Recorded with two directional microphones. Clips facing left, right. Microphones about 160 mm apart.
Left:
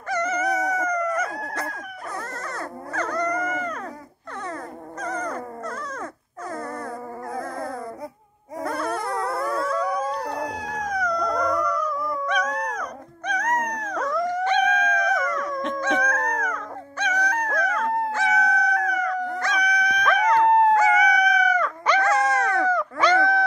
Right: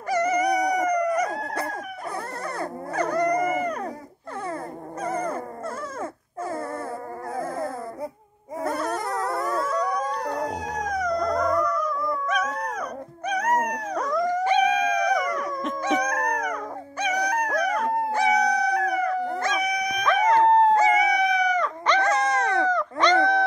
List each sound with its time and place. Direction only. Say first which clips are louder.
0.1 s howl: right 3 dB; 10° right (ahead or behind)
2.5 s dog: right 4 dB; 15° right (ahead or behind)
3.3 s a sound: right 3 dB; 15° right (ahead or behind)
7.3 s a sound: right 3 dB; 5° right (ahead or behind)
8.6 s howl: even; centre (ahead or behind)
13.3 s dog: right 1 dB; 10° right (ahead or behind)
14.4 s howl: even; 10° right (ahead or behind)
15.5 s dog: left 2 dB; centre (ahead or behind)
15.8 s dog: right 2 dB; 15° right (ahead or behind)
17.0 s howl: right 1 dB; 10° right (ahead or behind)
20.2 s dog: even; 25° right (ahead or behind)
22.0 s a sound: left 1 dB; 20° right (ahead or behind)
22.7 s a sound: even; 5° left (ahead or behind)